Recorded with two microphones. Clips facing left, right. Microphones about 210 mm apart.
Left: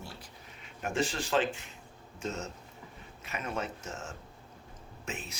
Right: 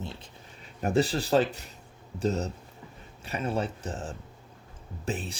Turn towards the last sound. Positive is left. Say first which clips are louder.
# right 8 dB
turn(degrees=-35)  # may be behind; listen again after turning